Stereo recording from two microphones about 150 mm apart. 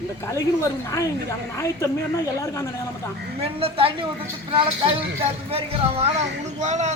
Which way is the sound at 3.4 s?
40° right (ahead or behind).